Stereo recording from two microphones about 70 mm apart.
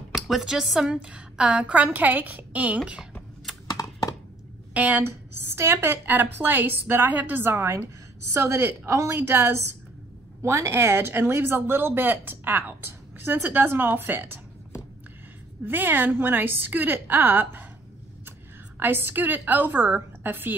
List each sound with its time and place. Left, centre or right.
0.1 s a woman's voice: centre; by 2.8 s right
3.6 s typing: left
4.7 s a woman's voice: right
5.3 s speech: right
15.6 s a woman's voice: right
18.8 s a woman's voice: right